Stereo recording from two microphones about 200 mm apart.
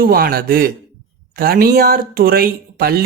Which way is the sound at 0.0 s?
45° right (ahead or behind).